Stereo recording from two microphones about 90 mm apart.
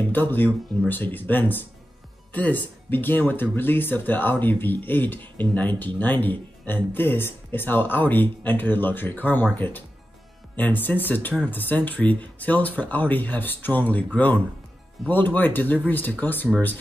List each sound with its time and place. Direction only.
0.1 s speech: 20° left (ahead or behind)